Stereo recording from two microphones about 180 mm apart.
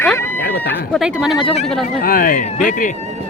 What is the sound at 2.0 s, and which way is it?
Speech, 50° left (ahead or behind).